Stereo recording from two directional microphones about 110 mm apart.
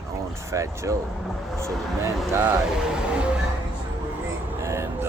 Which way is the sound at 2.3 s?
20° right (ahead or behind).